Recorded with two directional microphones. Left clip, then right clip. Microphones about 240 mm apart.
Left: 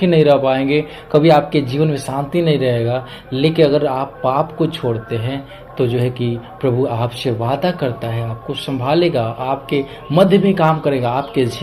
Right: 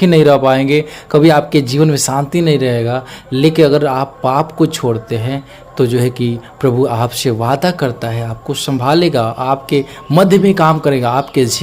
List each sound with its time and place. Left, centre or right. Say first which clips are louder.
0.0 s speech: right 3 dB; right